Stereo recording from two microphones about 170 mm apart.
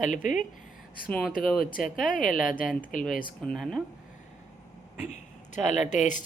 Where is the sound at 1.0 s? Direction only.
5° left (ahead or behind).